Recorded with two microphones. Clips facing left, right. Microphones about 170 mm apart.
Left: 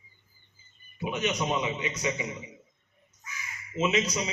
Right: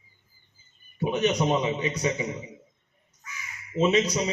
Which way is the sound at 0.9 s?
35° right (ahead or behind).